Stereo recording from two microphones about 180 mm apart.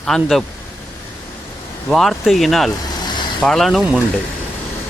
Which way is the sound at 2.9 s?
25° left (ahead or behind).